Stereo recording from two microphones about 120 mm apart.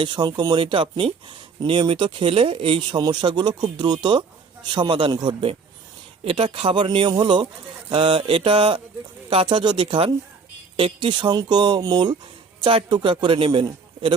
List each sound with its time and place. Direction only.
0.0 s speech: 40° right (ahead or behind)
3.0 s a man's voice: 40° right (ahead or behind)